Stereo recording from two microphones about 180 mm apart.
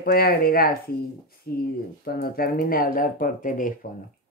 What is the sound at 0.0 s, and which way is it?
Speech, 60° left (ahead or behind).